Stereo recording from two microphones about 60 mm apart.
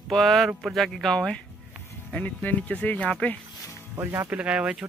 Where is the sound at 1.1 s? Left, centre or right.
Centre.